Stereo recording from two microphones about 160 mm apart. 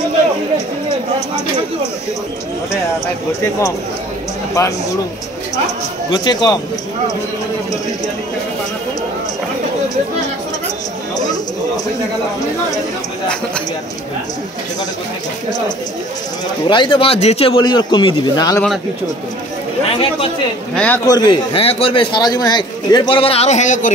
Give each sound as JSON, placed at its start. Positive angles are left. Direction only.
{"t": 4.6, "sound": "a man's voice", "side_deg": 20}
{"t": 6.1, "sound": "a man's voice", "side_deg": 25}
{"t": 11.1, "sound": "a man's voice", "side_deg": 25}
{"t": 16.6, "sound": "a man's voice", "side_deg": 30}
{"t": 19.9, "sound": "a man's voice", "side_deg": 35}
{"t": 20.7, "sound": "speech", "side_deg": 5}
{"t": 21.0, "sound": "a man's voice", "side_deg": 25}